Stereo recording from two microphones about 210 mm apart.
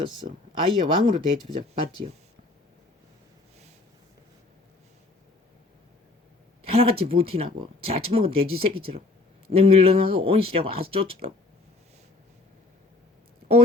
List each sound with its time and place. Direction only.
0.0 s speech: 20° right (ahead or behind)
6.7 s speech: 30° right (ahead or behind)